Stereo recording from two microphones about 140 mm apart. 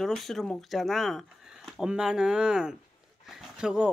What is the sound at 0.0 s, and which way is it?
Speech, centre (ahead or behind).